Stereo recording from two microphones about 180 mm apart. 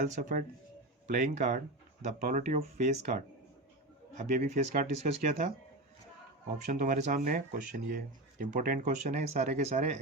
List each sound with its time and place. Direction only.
0.2 s speech: 45° right (ahead or behind)
4.3 s speech: 40° right (ahead or behind)
6.7 s speech: 45° right (ahead or behind)